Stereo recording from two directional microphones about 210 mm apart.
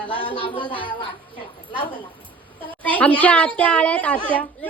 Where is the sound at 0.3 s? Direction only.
25° left (ahead or behind).